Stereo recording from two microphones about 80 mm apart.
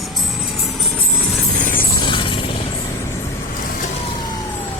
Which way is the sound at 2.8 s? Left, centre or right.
Left.